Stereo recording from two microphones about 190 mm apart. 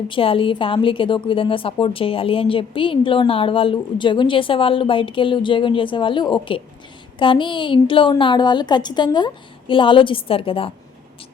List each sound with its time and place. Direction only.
0.1 s a woman's voice: 30° left (ahead or behind)